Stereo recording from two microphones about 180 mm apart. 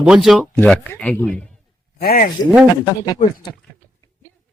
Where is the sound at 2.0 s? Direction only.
55° left (ahead or behind).